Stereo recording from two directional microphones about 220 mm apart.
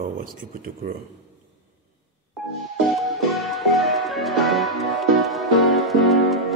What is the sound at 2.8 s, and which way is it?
Music, centre (ahead or behind).